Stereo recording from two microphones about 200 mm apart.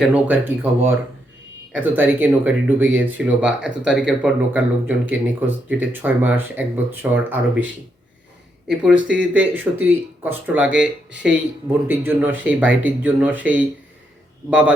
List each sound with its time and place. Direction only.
0.0 s speech: 10° right (ahead or behind)